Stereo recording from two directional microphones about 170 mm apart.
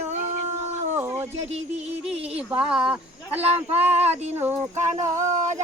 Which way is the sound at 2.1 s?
35° right (ahead or behind).